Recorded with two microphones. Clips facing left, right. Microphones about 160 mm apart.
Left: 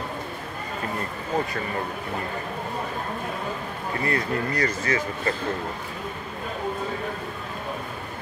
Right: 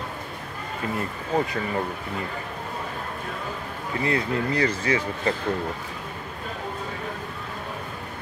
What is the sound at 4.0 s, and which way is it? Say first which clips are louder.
Speech: right 2 dB; 10° right (ahead or behind).